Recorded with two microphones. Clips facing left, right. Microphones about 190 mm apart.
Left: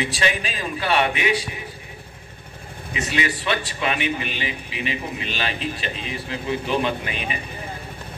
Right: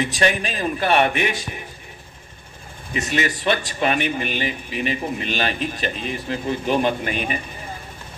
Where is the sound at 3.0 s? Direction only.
45° right (ahead or behind).